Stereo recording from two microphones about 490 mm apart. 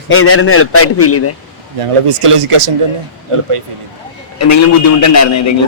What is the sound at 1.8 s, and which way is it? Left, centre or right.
Speech, right.